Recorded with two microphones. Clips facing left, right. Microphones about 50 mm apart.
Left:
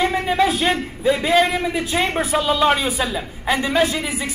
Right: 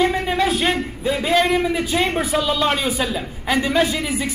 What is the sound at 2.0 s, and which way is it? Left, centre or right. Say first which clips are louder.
Speech: left 1 dB; left.